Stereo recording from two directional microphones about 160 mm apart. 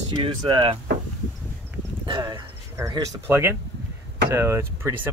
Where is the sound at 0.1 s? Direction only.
30° right (ahead or behind).